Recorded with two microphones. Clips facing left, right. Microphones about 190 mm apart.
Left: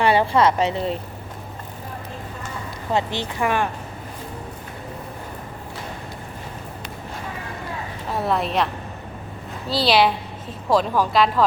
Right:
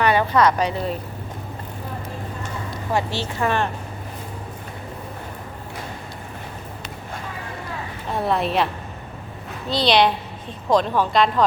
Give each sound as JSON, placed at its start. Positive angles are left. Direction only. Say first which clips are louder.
{"t": 0.0, "sound": "speech", "louder": "even", "side_deg": 30}
{"t": 2.9, "sound": "speech", "louder": "left 1 dB", "side_deg": 15}
{"t": 8.1, "sound": "speech", "louder": "right 1 dB", "side_deg": 0}